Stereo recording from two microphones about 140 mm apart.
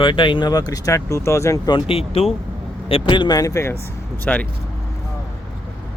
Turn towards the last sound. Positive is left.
turn(degrees=10)  # may be behind; listen again after turning